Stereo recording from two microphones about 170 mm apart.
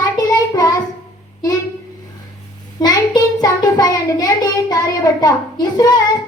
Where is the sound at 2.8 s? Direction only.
25° left (ahead or behind).